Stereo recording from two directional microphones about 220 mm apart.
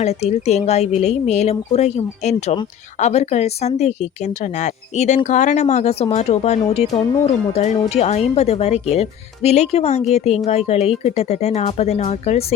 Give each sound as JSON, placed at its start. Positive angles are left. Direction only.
{"t": 0.0, "sound": "speech", "side_deg": 30}